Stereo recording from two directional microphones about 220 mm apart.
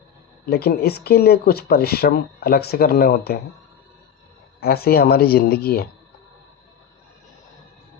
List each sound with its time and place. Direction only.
0.5 s speech: 45° left (ahead or behind)
4.6 s speech: 45° left (ahead or behind)